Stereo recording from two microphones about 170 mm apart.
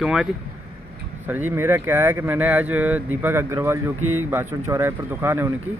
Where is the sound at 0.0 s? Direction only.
5° right (ahead or behind).